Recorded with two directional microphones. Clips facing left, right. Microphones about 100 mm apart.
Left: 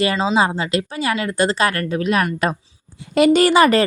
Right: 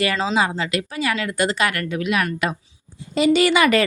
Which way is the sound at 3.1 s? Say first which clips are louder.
Left 4 dB; 50° left (ahead or behind).